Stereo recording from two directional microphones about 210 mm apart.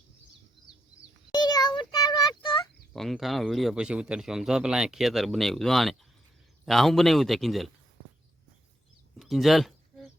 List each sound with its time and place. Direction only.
1.3 s child singing: 20° left (ahead or behind)
2.9 s a man's voice: centre (ahead or behind)
9.1 s a sound: centre (ahead or behind)